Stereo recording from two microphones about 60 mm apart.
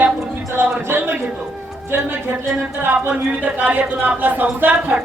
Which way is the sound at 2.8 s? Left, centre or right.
Right.